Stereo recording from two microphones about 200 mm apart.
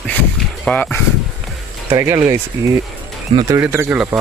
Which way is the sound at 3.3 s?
25° right (ahead or behind).